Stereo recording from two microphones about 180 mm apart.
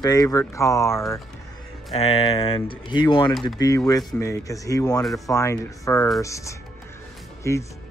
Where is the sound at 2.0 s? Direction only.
35° left (ahead or behind).